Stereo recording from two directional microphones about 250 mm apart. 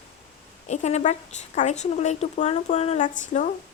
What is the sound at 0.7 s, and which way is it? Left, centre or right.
A woman's voice, left.